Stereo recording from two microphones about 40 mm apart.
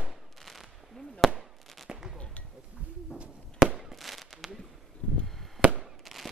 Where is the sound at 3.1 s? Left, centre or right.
Right.